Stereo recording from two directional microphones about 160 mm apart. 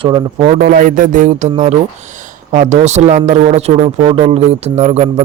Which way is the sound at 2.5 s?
45° right (ahead or behind).